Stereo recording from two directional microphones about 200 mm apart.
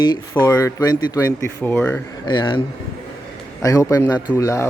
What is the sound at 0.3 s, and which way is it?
Speech, 15° left (ahead or behind).